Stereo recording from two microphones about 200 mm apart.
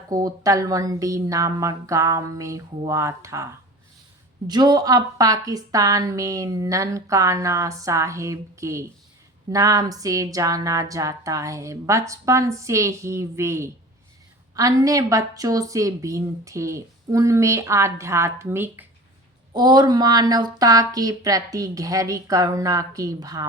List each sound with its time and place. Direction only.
0.1 s a woman's voice: 20° right (ahead or behind)